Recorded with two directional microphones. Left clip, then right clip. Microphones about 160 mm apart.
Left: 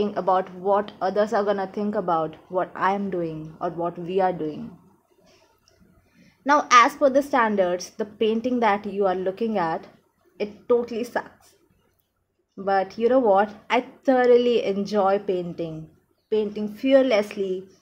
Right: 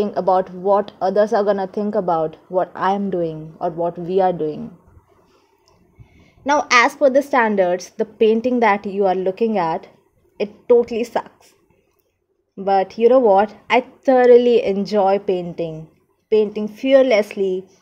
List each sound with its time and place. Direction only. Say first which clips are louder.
0.0 s a woman's voice: right 5 dB; 30° right (ahead or behind)
6.4 s a woman's voice: right 2 dB; 35° right (ahead or behind)
12.6 s a woman's voice: right 7 dB; 35° right (ahead or behind)